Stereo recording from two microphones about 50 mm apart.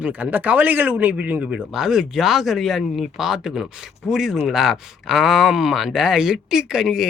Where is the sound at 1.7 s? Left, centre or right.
Centre.